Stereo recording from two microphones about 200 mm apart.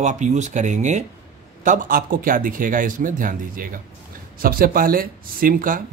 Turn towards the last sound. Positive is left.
turn(degrees=-45)  # may be behind; listen again after turning